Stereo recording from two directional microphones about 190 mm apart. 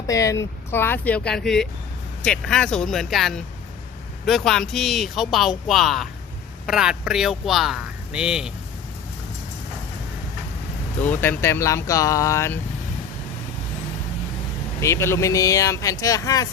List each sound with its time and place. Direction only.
0.1 s speech: 15° left (ahead or behind); by 8.5 s 5° right (ahead or behind)
11.1 s speech: 10° left (ahead or behind)
14.8 s speech: 15° left (ahead or behind)